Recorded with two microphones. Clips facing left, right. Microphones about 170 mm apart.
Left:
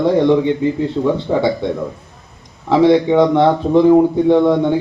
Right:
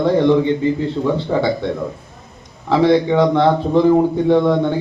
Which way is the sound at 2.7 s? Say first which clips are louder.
Left 2 dB; 15° left (ahead or behind).